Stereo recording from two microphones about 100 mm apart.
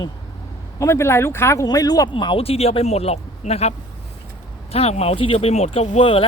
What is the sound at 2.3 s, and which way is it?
A man's voice, 75° left (ahead or behind).